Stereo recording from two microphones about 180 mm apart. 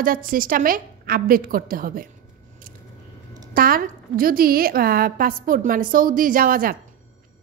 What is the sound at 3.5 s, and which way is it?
A woman's voice, 50° right (ahead or behind).